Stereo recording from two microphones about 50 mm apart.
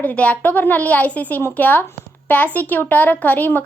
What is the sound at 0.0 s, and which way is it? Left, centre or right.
A woman's voice, left.